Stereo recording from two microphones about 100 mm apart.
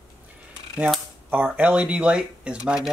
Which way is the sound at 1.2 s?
15° right (ahead or behind).